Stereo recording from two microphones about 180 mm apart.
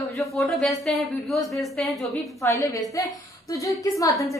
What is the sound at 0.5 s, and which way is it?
Speech, centre (ahead or behind).